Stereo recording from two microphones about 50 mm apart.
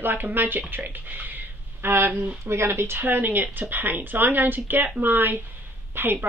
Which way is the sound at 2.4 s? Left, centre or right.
Right.